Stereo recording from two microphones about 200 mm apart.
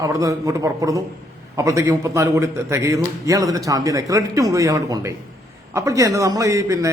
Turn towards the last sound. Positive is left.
turn(degrees=-15)  # may be behind; listen again after turning